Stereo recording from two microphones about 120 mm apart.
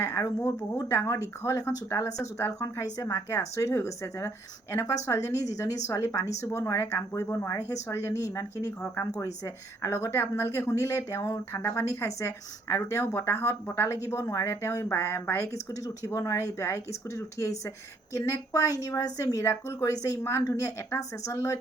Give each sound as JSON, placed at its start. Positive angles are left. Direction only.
{"t": 0.0, "sound": "speech", "side_deg": 25}